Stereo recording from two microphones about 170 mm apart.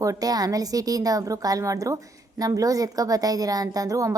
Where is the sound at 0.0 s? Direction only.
20° right (ahead or behind).